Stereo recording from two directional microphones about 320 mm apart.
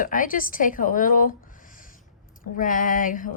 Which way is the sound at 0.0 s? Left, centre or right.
Left.